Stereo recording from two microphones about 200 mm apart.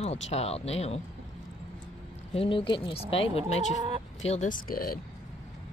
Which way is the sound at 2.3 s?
25° left (ahead or behind).